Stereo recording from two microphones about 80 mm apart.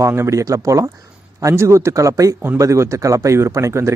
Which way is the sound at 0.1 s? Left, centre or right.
Right.